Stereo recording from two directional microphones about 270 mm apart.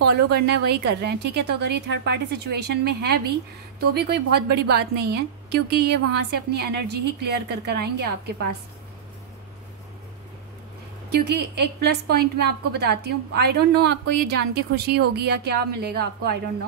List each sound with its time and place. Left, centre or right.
0.0 s a woman's voice: right
11.2 s a woman's voice: right